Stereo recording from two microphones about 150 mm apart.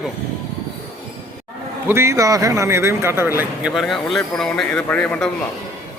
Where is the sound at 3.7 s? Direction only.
Centre (ahead or behind).